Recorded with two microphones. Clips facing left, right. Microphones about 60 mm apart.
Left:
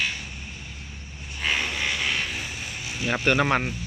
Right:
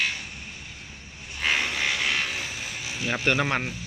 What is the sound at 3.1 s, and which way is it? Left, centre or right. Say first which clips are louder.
Speech: left 3 dB; left.